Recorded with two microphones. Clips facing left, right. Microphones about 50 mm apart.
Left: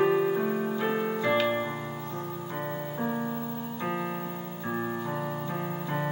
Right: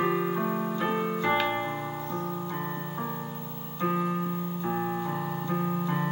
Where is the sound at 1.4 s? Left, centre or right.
Centre.